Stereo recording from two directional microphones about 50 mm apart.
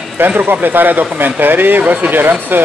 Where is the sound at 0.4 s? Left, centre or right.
Right.